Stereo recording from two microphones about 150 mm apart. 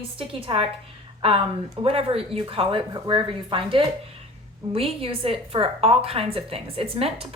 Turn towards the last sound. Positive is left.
turn(degrees=-40)  # may be behind; listen again after turning